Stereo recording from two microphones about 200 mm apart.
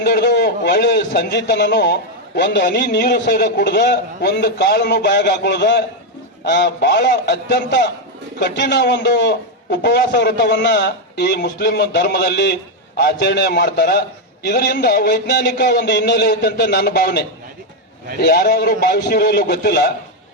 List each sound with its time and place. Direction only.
0.0 s a man's voice: 55° left (ahead or behind)